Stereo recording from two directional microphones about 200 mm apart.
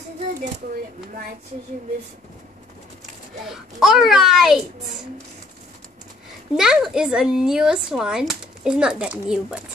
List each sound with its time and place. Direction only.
3.4 s speech: centre (ahead or behind)
6.5 s speech: 5° right (ahead or behind)